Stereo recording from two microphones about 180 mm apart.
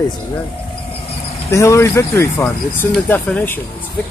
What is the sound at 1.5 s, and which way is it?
Speech, 15° left (ahead or behind).